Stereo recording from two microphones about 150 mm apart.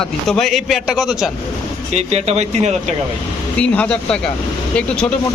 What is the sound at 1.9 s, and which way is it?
Speech, 45° right (ahead or behind).